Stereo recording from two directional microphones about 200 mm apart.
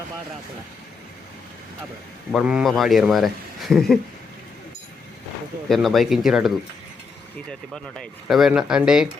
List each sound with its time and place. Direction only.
2.3 s a man's voice: 5° right (ahead or behind)
5.6 s a man's voice: centre (ahead or behind)
7.7 s a man's voice: centre (ahead or behind)